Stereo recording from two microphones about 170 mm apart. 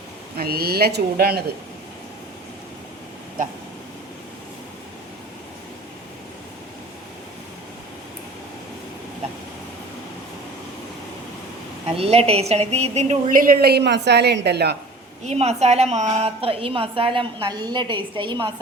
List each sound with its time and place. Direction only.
0.3 s a woman's voice: 65° right (ahead or behind)
11.9 s a woman's voice: 35° right (ahead or behind); by 14.8 s 75° right (ahead or behind)
15.2 s a woman's voice: 40° right (ahead or behind)